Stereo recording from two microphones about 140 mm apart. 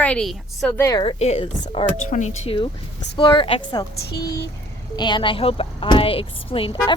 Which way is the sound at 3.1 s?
35° left (ahead or behind).